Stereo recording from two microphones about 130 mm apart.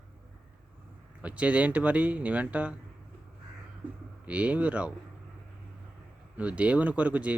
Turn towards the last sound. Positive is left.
turn(degrees=-10)  # may be behind; listen again after turning